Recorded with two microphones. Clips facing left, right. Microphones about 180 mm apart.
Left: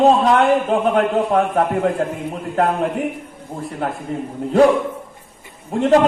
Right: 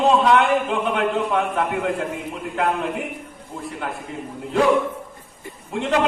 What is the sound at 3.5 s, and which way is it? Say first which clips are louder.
Speech: left 4 dB; 50° left (ahead or behind).